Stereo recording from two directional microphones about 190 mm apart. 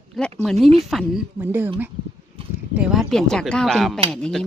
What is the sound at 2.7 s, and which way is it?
Speech, 5° right (ahead or behind).